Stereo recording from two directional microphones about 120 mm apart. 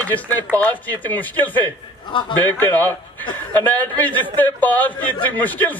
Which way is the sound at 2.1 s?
40° left (ahead or behind).